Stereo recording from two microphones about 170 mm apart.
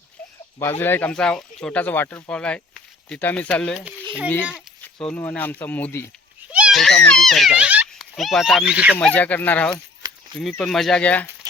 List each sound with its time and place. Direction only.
0.6 s speech: 15° left (ahead or behind)
6.5 s children playing: 5° right (ahead or behind)
7.1 s speech: centre (ahead or behind)
9.0 s speech: 10° left (ahead or behind)
10.0 s a sound: 25° right (ahead or behind)
10.6 s speech: centre (ahead or behind)